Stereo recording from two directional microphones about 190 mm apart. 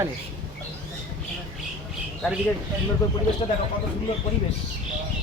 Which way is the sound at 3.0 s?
20° left (ahead or behind).